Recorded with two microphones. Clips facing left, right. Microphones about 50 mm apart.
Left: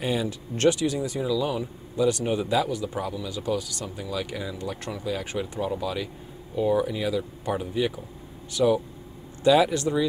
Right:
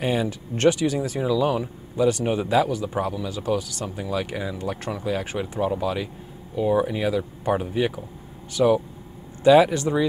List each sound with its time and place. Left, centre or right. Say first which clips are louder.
0.0 s speech: right 3 dB; right
5.8 s speech: right 4 dB; right